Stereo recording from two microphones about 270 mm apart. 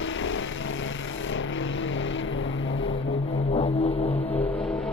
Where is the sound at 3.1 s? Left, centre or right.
Left.